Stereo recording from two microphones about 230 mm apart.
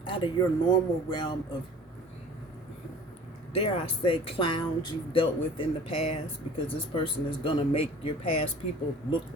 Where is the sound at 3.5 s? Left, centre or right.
Left.